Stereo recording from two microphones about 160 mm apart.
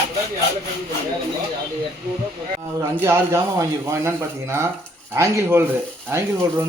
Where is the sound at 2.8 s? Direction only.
15° right (ahead or behind).